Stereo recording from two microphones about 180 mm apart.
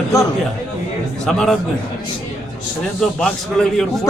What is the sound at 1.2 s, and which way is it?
Speech, 5° left (ahead or behind).